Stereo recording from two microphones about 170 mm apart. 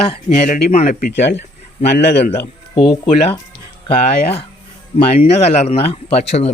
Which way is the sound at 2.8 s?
30° left (ahead or behind).